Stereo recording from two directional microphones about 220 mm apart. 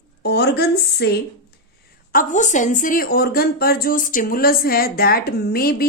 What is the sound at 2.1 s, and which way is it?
A woman's voice, 35° left (ahead or behind).